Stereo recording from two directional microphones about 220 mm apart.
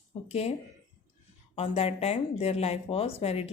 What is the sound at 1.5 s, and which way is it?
Speech, 30° left (ahead or behind).